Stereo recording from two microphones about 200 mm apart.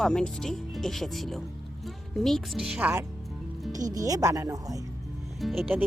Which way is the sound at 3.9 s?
15° right (ahead or behind).